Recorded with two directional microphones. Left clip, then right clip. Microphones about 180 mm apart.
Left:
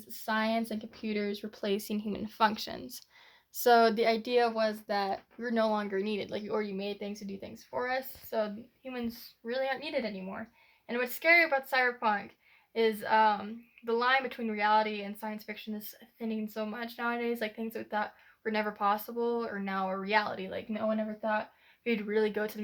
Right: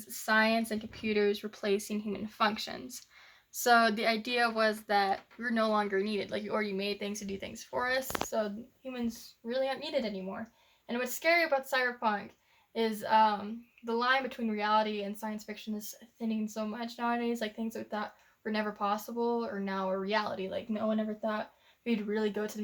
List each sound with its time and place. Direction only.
0.1 s speech: 40° left (ahead or behind); by 22.6 s centre (ahead or behind)